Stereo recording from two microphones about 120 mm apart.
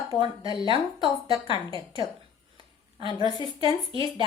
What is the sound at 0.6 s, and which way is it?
Speech, 45° right (ahead or behind).